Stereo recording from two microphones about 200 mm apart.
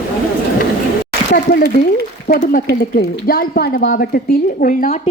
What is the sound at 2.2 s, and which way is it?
A woman's voice, 45° left (ahead or behind).